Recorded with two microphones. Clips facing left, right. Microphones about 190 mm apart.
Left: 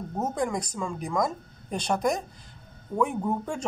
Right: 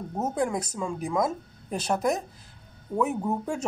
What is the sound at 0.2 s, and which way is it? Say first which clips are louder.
Speech: right 1 dB; 5° right (ahead or behind).